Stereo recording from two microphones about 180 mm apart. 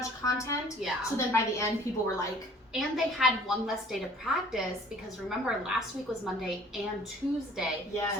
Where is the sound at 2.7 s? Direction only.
Centre (ahead or behind).